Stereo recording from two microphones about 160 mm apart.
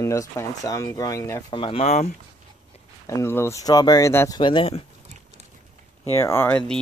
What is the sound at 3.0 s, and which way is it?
Speech, 20° left (ahead or behind).